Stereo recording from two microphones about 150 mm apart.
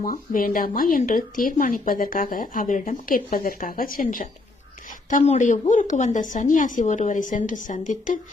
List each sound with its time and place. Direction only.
0.0 s a woman's voice: 65° left (ahead or behind)
5.0 s a woman's voice: 50° left (ahead or behind)